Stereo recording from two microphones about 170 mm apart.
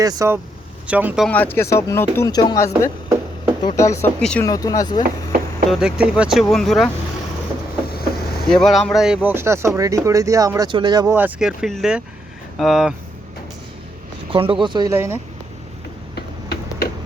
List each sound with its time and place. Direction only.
0.0 s speech: 20° right (ahead or behind)
0.9 s speech: 10° right (ahead or behind)
1.3 s speech: 10° left (ahead or behind)
4.2 s speech: 5° left (ahead or behind)
4.4 s speech: 20° left (ahead or behind)
5.0 s chop: 60° right (ahead or behind)
5.7 s speech: 5° right (ahead or behind)
7.9 s vehicle: 65° left (ahead or behind)
8.4 s speech: centre (ahead or behind); by 11.0 s 25° right (ahead or behind)
11.0 s speech: 10° right (ahead or behind)
14.3 s speech: 30° right (ahead or behind)
14.9 s speech: 15° right (ahead or behind)